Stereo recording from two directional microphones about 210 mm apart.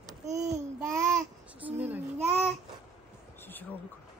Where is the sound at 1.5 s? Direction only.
5° right (ahead or behind).